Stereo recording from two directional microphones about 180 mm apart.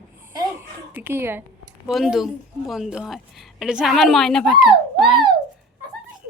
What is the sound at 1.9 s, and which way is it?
A woman's voice, centre (ahead or behind).